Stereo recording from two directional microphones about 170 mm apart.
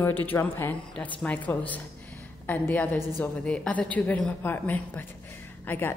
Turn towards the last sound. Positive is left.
turn(degrees=15)  # may be behind; listen again after turning